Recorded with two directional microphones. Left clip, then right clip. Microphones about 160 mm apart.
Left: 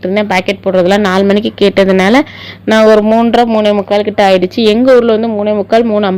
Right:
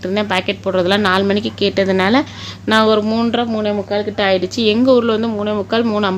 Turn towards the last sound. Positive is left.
turn(degrees=25)  # may be behind; listen again after turning